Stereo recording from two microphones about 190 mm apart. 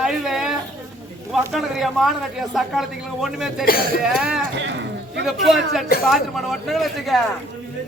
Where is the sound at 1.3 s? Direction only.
Centre (ahead or behind).